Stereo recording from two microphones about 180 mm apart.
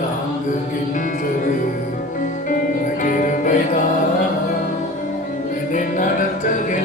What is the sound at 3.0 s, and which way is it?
Music, 45° left (ahead or behind).